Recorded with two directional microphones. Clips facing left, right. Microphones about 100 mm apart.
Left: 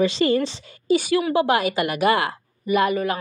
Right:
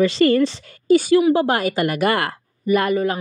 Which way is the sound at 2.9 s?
30° right (ahead or behind).